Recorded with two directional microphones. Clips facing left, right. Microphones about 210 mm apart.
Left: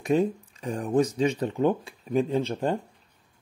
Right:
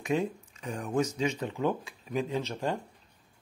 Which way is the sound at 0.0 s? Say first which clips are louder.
Left 6 dB; 35° left (ahead or behind).